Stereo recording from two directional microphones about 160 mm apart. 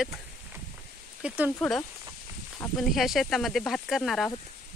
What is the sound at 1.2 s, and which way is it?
Speech, 5° right (ahead or behind).